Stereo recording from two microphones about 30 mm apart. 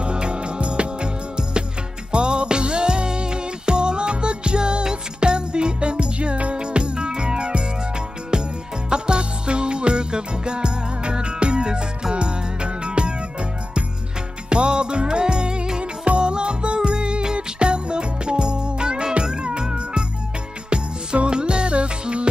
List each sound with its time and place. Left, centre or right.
0.0 s music: right
14.5 s music: right